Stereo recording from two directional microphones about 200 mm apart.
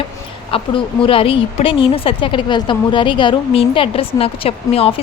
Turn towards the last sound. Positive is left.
turn(degrees=30)  # may be behind; listen again after turning